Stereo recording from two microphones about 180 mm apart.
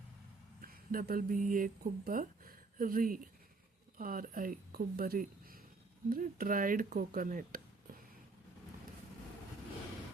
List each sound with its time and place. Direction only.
0.6 s speech: 55° right (ahead or behind)